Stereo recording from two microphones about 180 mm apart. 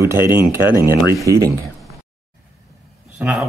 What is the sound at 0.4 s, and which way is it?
Speech, 20° left (ahead or behind).